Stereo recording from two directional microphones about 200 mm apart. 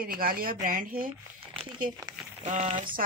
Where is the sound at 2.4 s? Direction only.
35° right (ahead or behind).